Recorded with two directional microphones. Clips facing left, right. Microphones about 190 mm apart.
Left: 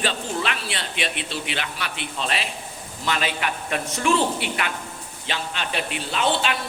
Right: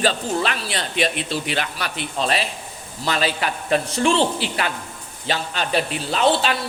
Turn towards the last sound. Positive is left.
turn(degrees=-35)  # may be behind; listen again after turning